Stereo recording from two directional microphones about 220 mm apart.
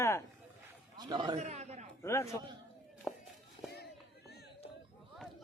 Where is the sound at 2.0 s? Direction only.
15° left (ahead or behind).